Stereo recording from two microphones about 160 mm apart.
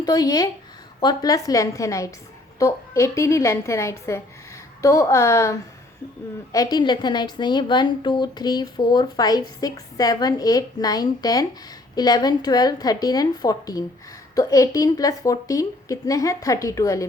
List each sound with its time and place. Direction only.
0.0 s a woman's voice: 25° left (ahead or behind)